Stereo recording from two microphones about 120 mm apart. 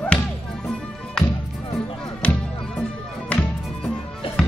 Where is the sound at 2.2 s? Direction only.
10° left (ahead or behind).